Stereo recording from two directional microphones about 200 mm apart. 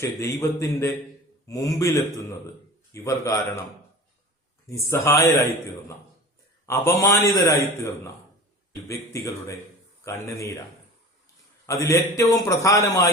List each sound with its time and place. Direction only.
0.0 s a man's voice: 15° left (ahead or behind)
4.7 s a man's voice: 15° left (ahead or behind)
6.8 s a man's voice: 15° left (ahead or behind)
11.6 s a man's voice: 15° left (ahead or behind)